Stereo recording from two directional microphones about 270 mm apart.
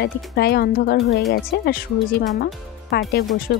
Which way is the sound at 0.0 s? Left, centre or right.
Left.